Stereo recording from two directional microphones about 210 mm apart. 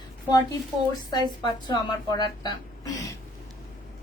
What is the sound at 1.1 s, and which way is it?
A woman's voice, 20° left (ahead or behind).